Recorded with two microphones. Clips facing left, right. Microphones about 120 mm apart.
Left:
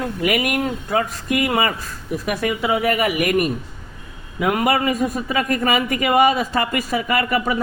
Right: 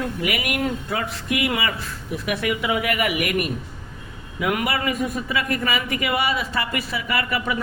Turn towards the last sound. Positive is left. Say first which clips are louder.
# left 5 dB
turn(degrees=40)  # may be behind; listen again after turning